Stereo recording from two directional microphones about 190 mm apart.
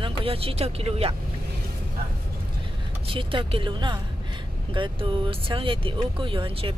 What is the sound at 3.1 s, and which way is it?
Speech, 25° right (ahead or behind).